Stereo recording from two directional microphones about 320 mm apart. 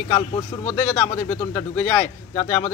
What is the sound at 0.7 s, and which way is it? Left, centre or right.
Speech, centre.